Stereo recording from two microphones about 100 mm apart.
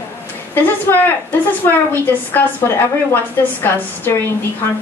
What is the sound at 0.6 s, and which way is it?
A woman's voice, 20° left (ahead or behind).